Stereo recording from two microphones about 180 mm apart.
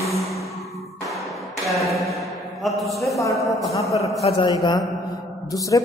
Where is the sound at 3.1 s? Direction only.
15° left (ahead or behind).